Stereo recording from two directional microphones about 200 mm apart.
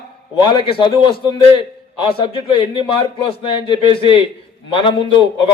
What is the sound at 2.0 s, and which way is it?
A man's voice, 25° left (ahead or behind).